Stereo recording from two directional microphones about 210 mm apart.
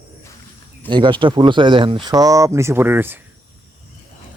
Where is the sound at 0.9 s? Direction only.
20° right (ahead or behind).